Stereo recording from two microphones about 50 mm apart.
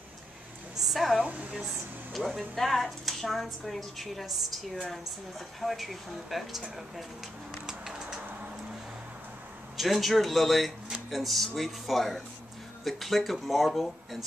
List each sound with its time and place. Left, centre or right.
0.7 s a sound: centre
1.2 s a woman's voice: right
2.1 s a woman's voice: centre
5.6 s a woman's voice: centre
7.6 s a sound: centre
9.8 s a woman's voice: centre